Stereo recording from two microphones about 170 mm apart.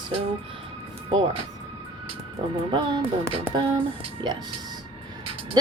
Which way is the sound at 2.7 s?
25° right (ahead or behind).